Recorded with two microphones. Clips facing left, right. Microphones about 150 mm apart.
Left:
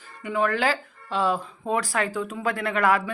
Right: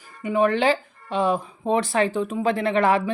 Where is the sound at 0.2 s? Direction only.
20° right (ahead or behind).